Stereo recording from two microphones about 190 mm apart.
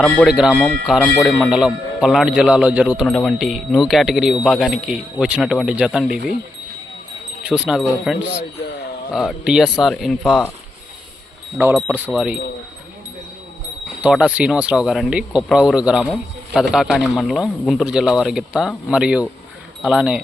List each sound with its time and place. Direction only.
0.0 s speech: centre (ahead or behind)
7.4 s speech: 5° right (ahead or behind)
11.5 s speech: 10° right (ahead or behind)
14.0 s speech: 5° right (ahead or behind)